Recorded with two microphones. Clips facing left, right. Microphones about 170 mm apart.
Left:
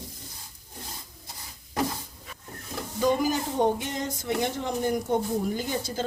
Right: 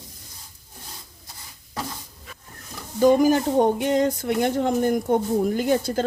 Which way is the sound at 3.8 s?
65° right (ahead or behind).